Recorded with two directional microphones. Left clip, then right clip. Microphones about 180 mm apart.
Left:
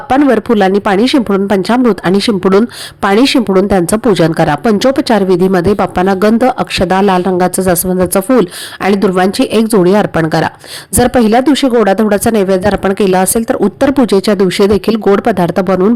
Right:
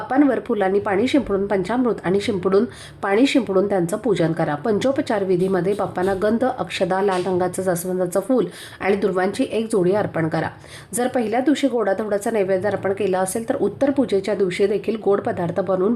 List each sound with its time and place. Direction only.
0.1 s speech: 40° left (ahead or behind)